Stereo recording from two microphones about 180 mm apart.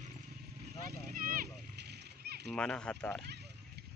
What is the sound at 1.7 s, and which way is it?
Splash, 65° right (ahead or behind).